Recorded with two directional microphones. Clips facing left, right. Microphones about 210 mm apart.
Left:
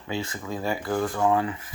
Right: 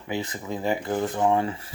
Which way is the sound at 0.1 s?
20° right (ahead or behind).